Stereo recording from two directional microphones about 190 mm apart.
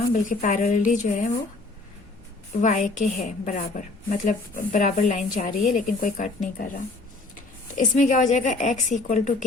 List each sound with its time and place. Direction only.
0.1 s a woman's voice: 40° left (ahead or behind)
2.6 s a woman's voice: 40° left (ahead or behind)
7.9 s a woman's voice: 40° left (ahead or behind)